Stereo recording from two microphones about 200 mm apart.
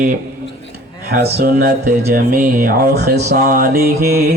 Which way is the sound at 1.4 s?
50° right (ahead or behind).